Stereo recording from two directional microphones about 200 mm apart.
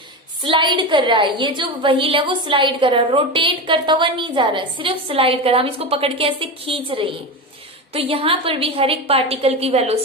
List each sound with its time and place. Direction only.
0.4 s a woman's voice: 25° right (ahead or behind)